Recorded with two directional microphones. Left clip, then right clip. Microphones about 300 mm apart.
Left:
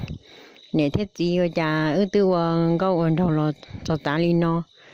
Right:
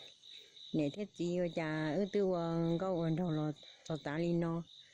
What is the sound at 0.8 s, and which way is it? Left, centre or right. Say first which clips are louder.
Speech: left 14 dB; left.